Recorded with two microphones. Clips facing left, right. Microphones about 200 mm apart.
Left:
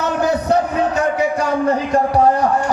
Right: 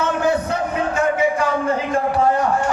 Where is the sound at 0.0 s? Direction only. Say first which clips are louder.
Left 1 dB; 40° left (ahead or behind).